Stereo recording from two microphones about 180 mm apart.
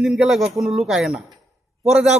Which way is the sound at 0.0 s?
Centre (ahead or behind).